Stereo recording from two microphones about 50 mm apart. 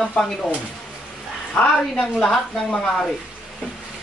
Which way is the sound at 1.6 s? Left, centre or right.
Centre.